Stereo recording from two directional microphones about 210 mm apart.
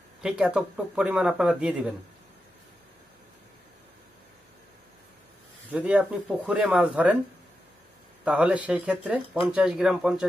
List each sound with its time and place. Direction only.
0.2 s speech: 5° right (ahead or behind)
5.7 s speech: 5° right (ahead or behind)
8.2 s speech: 5° right (ahead or behind)